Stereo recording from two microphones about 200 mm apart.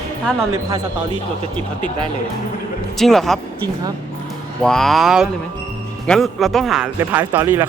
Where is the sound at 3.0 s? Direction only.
Centre (ahead or behind).